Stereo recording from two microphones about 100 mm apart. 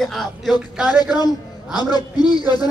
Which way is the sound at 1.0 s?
45° left (ahead or behind).